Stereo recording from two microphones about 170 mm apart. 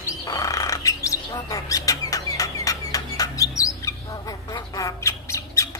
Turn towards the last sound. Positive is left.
turn(degrees=20)  # may be behind; listen again after turning